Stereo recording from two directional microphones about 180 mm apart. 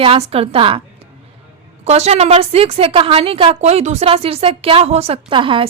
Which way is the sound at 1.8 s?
40° right (ahead or behind).